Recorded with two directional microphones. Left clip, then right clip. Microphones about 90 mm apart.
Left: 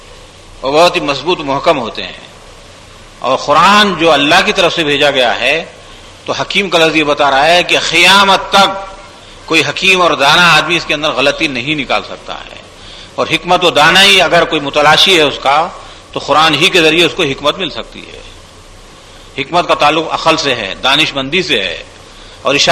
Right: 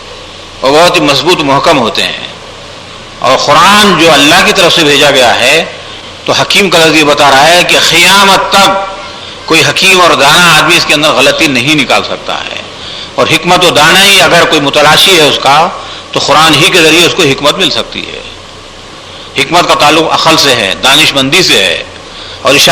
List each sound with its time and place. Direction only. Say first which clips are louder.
0.6 s a man's voice: right 5 dB; 35° right (ahead or behind)
1.9 s a man's voice: right 12 dB; 35° right (ahead or behind)
3.2 s a man's voice: right 5 dB; 45° right (ahead or behind)
19.4 s a man's voice: right 5 dB; 30° right (ahead or behind)
20.8 s a man's voice: right 5 dB; 45° right (ahead or behind)